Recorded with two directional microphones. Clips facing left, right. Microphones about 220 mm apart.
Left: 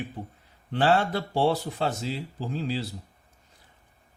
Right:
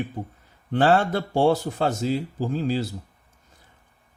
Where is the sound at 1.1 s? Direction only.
45° right (ahead or behind).